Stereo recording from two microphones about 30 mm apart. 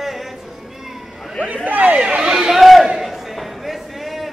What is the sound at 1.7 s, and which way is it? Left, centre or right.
Chatter, right.